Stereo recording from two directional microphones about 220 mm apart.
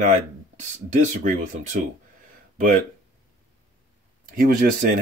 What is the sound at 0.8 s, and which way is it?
Speech, 35° right (ahead or behind).